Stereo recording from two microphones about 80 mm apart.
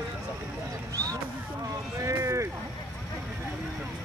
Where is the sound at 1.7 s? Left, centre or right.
Right.